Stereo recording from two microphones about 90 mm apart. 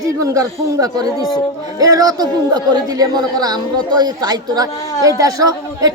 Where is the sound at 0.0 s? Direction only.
40° right (ahead or behind).